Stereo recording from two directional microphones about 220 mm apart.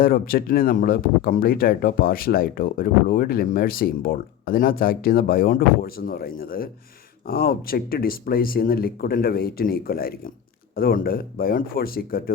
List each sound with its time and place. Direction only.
0.0 s speech: 40° left (ahead or behind)